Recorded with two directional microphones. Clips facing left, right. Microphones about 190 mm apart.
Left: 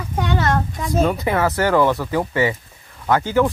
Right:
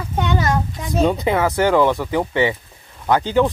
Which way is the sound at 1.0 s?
20° right (ahead or behind).